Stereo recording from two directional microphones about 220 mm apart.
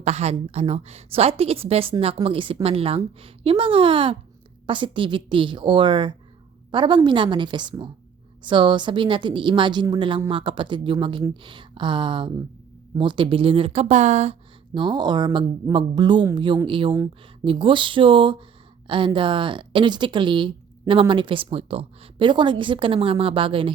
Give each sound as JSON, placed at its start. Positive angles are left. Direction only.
{"t": 0.0, "sound": "speech", "side_deg": -30}